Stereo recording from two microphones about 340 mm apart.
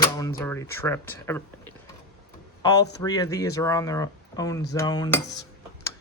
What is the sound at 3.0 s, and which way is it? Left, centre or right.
Speech, centre.